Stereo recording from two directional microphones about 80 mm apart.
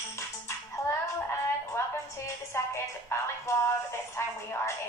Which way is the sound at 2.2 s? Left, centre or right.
Left.